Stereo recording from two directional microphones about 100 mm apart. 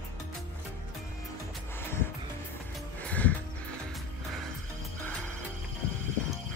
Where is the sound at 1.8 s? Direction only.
25° left (ahead or behind).